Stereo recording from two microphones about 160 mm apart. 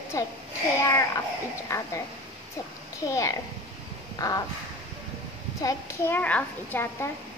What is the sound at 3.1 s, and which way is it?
Speech, 20° left (ahead or behind).